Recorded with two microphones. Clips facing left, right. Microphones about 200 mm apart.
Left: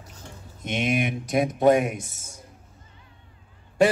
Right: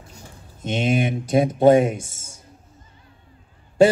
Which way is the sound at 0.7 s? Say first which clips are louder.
Right 4 dB; 30° right (ahead or behind).